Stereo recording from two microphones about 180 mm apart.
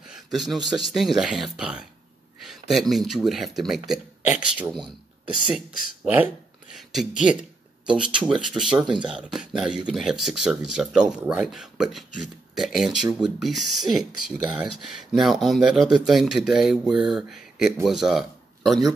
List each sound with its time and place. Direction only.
0.1 s speech: centre (ahead or behind)
6.0 s speech: 10° right (ahead or behind)
8.8 s speech: 25° right (ahead or behind)
9.1 s speech: 5° right (ahead or behind)